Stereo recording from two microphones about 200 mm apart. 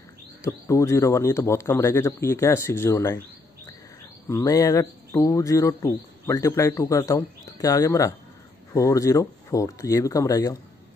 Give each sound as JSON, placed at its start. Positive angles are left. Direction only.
{"t": 0.7, "sound": "speech", "side_deg": 15}
{"t": 4.3, "sound": "speech", "side_deg": 15}